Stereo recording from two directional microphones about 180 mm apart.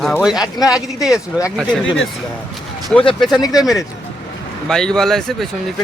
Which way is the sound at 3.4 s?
20° left (ahead or behind).